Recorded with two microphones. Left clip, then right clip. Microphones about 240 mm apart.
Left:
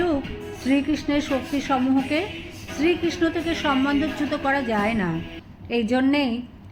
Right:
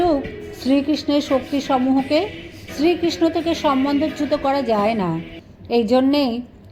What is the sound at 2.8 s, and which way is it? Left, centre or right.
A woman's voice, centre.